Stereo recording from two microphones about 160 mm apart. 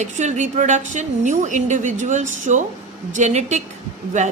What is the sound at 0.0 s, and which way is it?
A woman's voice, 50° right (ahead or behind).